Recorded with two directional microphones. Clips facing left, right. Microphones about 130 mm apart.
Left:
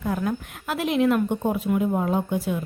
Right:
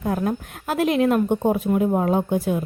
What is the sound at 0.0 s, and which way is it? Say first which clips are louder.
Speech: right 3 dB; 40° right (ahead or behind).